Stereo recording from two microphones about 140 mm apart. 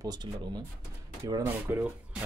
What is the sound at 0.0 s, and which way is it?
Speech, 30° right (ahead or behind).